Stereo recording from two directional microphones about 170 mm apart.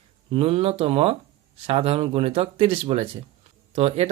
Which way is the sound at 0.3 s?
35° right (ahead or behind).